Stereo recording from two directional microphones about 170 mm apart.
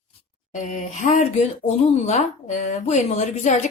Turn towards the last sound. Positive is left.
turn(degrees=45)  # may be behind; listen again after turning